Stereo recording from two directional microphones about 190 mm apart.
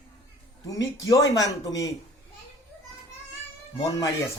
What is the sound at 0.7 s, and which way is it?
Speech, 20° left (ahead or behind).